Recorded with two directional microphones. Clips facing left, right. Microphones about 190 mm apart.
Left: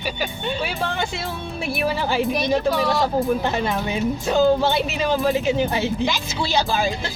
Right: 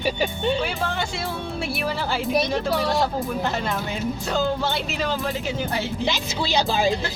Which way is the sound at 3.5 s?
15° left (ahead or behind).